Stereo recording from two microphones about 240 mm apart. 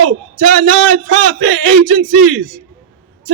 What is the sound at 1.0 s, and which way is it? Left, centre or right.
Speech, right.